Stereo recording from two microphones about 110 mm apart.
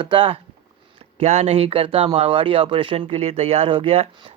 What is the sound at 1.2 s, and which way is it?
Speech, 80° right.